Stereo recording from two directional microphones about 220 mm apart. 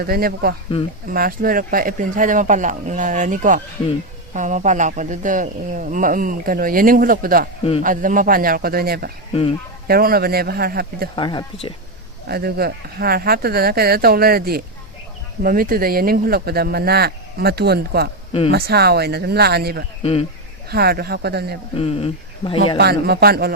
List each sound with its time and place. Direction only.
0.0 s speech: 45° right (ahead or behind)
9.3 s speech: 25° left (ahead or behind)
9.8 s speech: 40° right (ahead or behind)
11.1 s speech: 20° left (ahead or behind)
12.3 s speech: 45° right (ahead or behind)
20.0 s speech: 25° left (ahead or behind)
20.7 s speech: 45° right (ahead or behind)
21.8 s speech: 25° left (ahead or behind)
22.8 s speech: 45° right (ahead or behind)